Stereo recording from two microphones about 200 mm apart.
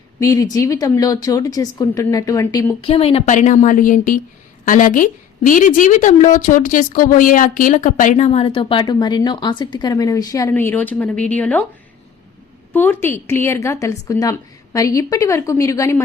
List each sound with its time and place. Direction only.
0.2 s speech: 15° left (ahead or behind)
2.9 s a woman's voice: 30° left (ahead or behind); by 11.6 s 5° left (ahead or behind)
12.7 s speech: 10° left (ahead or behind)